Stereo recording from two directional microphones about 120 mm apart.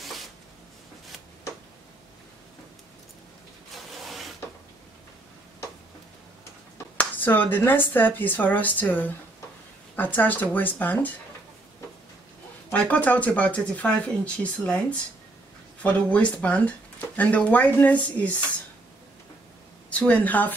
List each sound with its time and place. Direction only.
3.7 s rub: centre (ahead or behind)
7.0 s speech: 15° left (ahead or behind)
12.7 s speech: 10° left (ahead or behind)
19.9 s speech: 10° left (ahead or behind)